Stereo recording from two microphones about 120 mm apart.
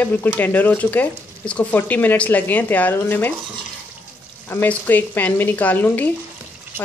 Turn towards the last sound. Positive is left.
turn(degrees=15)  # may be behind; listen again after turning